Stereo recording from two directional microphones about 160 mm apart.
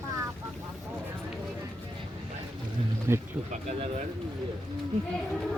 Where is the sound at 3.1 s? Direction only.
15° right (ahead or behind).